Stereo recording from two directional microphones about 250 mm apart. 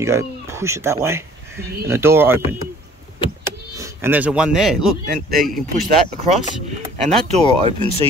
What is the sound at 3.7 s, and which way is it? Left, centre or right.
A man's voice, centre.